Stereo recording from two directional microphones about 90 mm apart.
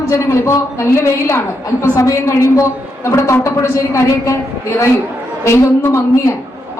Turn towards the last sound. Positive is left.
turn(degrees=30)  # may be behind; listen again after turning